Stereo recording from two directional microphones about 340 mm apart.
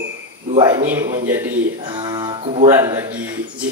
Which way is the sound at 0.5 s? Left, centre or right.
Centre.